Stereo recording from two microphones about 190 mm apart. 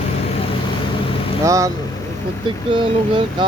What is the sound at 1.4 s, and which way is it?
Speech, 15° right (ahead or behind).